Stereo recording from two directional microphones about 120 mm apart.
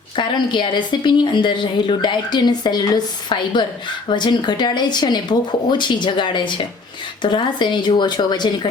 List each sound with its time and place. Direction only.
0.2 s speech: 40° left (ahead or behind)